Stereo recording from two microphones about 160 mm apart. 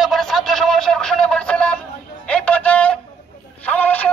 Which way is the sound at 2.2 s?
10° left (ahead or behind).